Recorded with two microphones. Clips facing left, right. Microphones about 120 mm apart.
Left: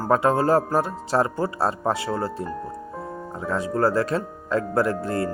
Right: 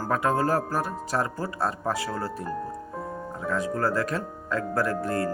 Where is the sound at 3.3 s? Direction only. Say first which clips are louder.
Left 3 dB; 30° left (ahead or behind).